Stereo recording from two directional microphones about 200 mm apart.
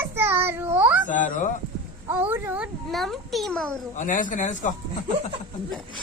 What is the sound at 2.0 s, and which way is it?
A child's voice, 10° right (ahead or behind).